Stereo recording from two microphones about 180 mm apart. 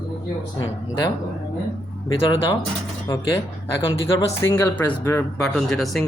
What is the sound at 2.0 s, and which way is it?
Speech, 25° left (ahead or behind).